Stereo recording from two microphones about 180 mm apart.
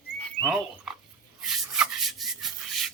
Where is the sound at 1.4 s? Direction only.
Centre (ahead or behind).